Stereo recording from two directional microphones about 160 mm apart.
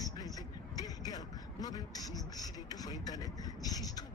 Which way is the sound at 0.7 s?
25° left (ahead or behind).